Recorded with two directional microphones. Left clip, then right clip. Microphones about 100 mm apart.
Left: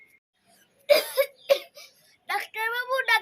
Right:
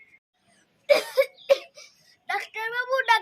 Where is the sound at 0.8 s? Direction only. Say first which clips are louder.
Right 1 dB; 20° right (ahead or behind).